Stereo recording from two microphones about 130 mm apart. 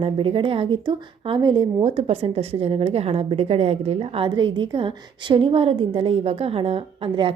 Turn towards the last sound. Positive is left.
turn(degrees=-45)  # may be behind; listen again after turning